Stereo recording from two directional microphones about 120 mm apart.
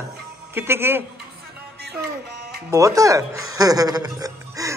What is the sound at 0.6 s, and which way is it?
Speech, 20° right (ahead or behind).